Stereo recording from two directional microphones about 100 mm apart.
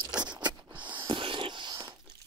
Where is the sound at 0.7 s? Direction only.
15° right (ahead or behind).